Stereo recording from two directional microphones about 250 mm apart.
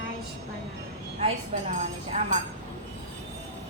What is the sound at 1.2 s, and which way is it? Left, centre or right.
A woman's voice, right.